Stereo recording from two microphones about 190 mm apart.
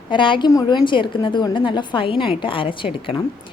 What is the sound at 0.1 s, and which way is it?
A woman's voice, 25° left (ahead or behind).